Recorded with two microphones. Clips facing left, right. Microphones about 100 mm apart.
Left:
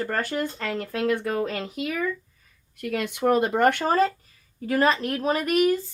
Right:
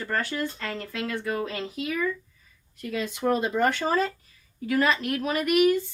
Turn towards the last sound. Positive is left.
turn(degrees=35)  # may be behind; listen again after turning